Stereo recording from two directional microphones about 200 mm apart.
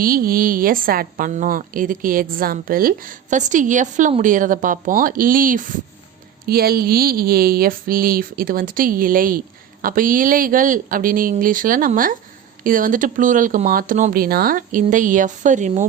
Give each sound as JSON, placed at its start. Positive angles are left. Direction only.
{"t": 0.0, "sound": "a woman's voice", "side_deg": -45}